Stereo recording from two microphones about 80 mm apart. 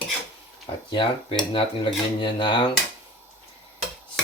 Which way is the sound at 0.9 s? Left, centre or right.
Left.